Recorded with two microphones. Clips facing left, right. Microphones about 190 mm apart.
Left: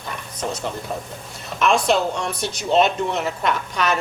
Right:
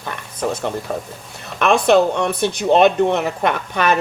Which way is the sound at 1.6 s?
60° right (ahead or behind).